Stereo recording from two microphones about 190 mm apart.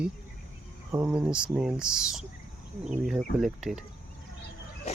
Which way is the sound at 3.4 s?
Centre (ahead or behind).